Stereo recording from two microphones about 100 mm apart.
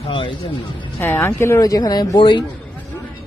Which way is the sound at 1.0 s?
20° left (ahead or behind).